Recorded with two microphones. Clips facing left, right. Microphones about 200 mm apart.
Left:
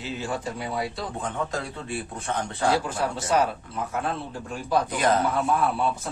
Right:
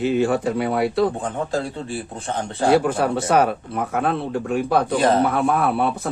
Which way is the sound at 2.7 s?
60° right (ahead or behind).